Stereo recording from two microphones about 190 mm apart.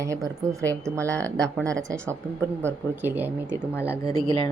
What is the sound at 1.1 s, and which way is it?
Speech, 5° left (ahead or behind).